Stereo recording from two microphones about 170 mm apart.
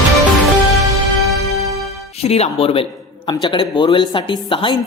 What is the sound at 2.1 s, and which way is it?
A man's voice, 35° left (ahead or behind).